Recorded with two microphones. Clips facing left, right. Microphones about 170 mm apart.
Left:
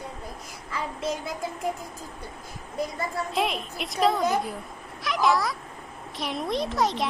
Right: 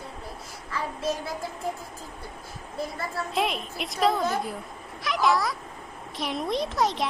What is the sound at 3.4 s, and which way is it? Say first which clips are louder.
A child's voice: right 1 dB; centre (ahead or behind).